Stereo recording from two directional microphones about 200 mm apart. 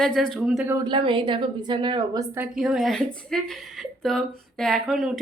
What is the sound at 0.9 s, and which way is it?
A woman's voice, 25° right (ahead or behind).